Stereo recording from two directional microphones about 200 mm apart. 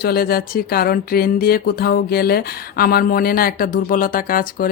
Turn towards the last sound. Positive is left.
turn(degrees=45)  # may be behind; listen again after turning